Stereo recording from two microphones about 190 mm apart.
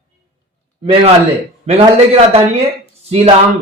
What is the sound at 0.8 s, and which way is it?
A man's voice, 30° right (ahead or behind).